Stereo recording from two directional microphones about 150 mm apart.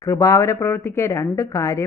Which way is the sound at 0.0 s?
20° left (ahead or behind).